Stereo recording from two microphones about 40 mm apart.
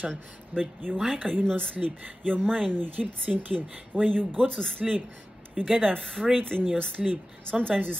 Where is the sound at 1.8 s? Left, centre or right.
Right.